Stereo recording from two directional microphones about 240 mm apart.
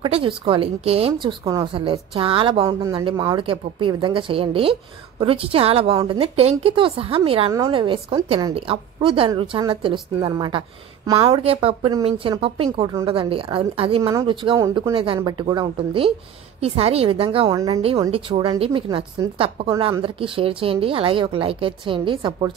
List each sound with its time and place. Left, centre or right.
0.0 s a woman's voice: right